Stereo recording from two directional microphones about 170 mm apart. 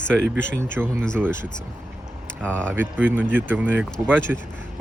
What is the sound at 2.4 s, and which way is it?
Speech, 5° left (ahead or behind).